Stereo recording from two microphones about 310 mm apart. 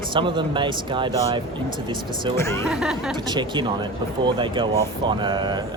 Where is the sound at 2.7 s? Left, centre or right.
Centre.